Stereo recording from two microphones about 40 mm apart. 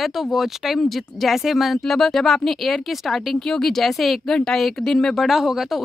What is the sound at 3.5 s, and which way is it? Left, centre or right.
Speech, centre.